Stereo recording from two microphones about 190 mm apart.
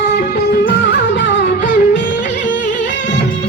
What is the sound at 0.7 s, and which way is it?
Music, 65° left (ahead or behind).